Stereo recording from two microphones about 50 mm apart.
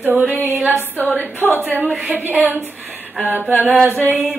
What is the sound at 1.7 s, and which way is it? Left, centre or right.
Speech, right.